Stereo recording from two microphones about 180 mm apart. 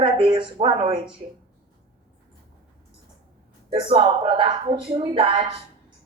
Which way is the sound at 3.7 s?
30° right (ahead or behind).